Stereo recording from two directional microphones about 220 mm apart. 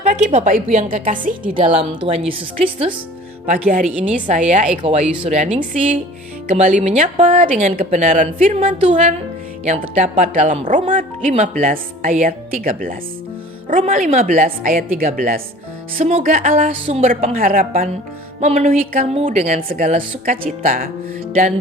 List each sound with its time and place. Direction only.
0.0 s speech: 30° right (ahead or behind)
1.5 s a woman's voice: 25° right (ahead or behind)
3.5 s speech: 35° right (ahead or behind)
3.8 s a woman's voice: 5° right (ahead or behind)
4.3 s a woman's voice: 35° right (ahead or behind)
6.5 s speech: 30° right (ahead or behind)